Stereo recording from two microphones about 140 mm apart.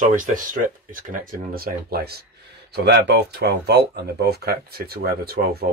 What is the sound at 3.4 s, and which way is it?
Speech, 90° right.